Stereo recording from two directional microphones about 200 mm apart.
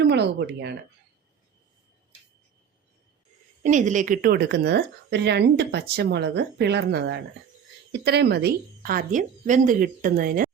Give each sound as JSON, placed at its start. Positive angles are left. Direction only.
{"t": 0.0, "sound": "speech", "side_deg": -60}
{"t": 3.6, "sound": "a woman's voice", "side_deg": -40}